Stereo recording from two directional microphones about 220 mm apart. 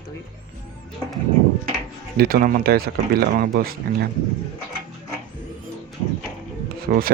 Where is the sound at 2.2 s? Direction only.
40° right (ahead or behind).